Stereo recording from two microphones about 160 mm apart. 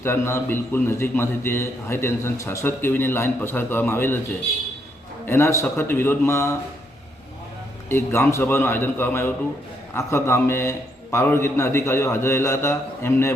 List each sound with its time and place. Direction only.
0.0 s a man's voice: 15° left (ahead or behind)
5.2 s a man's voice: 15° left (ahead or behind)
7.9 s a man's voice: 15° left (ahead or behind)